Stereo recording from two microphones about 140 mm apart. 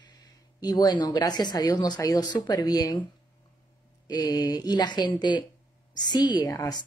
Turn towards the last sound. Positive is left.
turn(degrees=25)  # may be behind; listen again after turning